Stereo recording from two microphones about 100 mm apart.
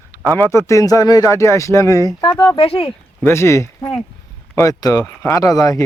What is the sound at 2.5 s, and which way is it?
Speech, 70° left (ahead or behind).